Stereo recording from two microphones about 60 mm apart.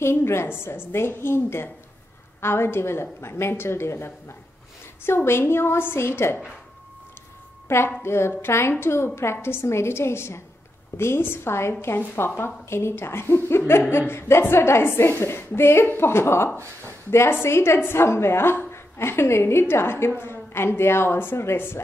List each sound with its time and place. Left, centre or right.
0.0 s a woman's voice: left
7.6 s a woman's voice: left